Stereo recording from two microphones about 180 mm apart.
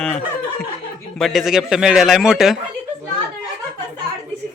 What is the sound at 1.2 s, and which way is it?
Speech, centre (ahead or behind).